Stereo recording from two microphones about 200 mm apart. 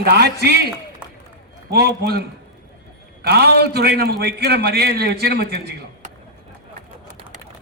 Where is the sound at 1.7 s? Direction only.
55° right (ahead or behind).